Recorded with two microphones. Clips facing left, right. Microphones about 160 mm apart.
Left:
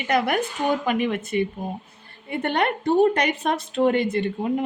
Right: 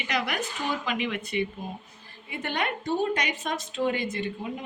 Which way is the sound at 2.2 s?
55° left (ahead or behind).